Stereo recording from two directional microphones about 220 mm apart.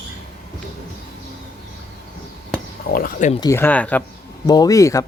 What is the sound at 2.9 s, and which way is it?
Speech, 35° left (ahead or behind).